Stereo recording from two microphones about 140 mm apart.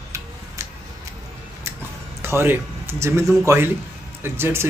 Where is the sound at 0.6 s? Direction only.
20° right (ahead or behind).